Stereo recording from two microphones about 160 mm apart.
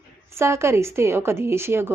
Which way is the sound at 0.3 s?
15° right (ahead or behind).